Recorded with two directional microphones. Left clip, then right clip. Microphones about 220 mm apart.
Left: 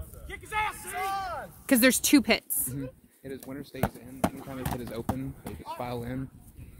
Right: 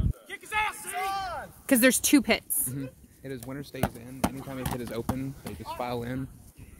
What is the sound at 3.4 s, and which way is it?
Speech, 55° right (ahead or behind).